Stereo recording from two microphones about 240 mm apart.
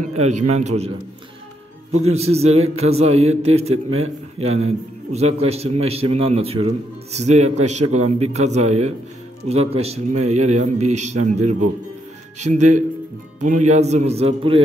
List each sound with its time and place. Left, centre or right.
0.1 s a man's voice: right
2.1 s a man's voice: right